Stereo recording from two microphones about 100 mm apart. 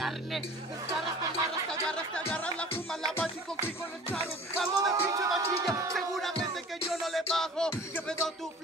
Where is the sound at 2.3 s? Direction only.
10° left (ahead or behind).